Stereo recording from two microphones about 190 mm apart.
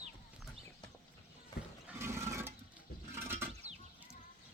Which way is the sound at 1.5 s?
20° left (ahead or behind).